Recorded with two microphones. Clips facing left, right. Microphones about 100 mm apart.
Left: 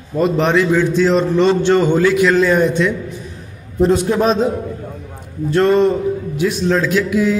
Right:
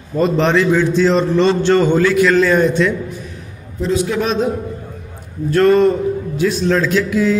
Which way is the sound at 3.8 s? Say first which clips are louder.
Left 4 dB; 50° left (ahead or behind).